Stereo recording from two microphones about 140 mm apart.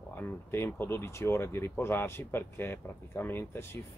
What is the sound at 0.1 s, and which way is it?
A man's voice, 15° left (ahead or behind).